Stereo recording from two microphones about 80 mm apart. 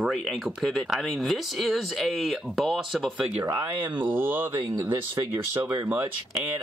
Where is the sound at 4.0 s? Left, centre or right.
Right.